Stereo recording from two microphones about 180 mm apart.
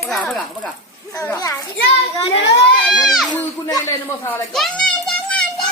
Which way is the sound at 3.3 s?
15° left (ahead or behind).